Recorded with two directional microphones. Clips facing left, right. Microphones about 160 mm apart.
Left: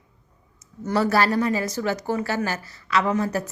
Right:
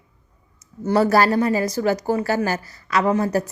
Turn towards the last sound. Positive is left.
turn(degrees=-35)  # may be behind; listen again after turning